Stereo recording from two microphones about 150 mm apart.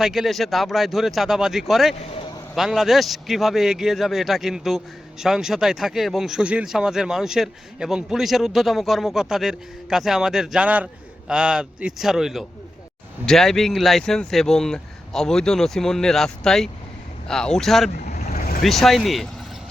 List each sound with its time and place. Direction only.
0.0 s speech: 5° right (ahead or behind)
18.0 s vehicle: 50° left (ahead or behind)
18.6 s speech: centre (ahead or behind)